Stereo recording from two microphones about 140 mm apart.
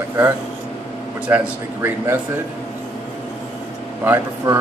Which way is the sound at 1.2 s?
10° right (ahead or behind).